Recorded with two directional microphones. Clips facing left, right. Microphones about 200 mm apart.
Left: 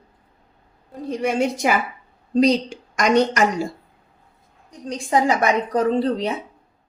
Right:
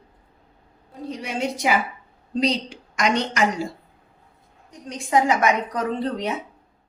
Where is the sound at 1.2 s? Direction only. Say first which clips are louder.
Left 10 dB; 50° left (ahead or behind).